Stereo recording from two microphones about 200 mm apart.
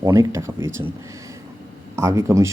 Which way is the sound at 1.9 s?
15° right (ahead or behind).